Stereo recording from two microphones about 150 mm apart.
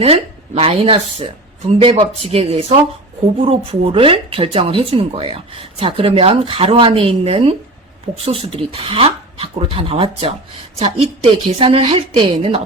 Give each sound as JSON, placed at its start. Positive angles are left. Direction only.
{"t": 0.0, "sound": "speech", "side_deg": -40}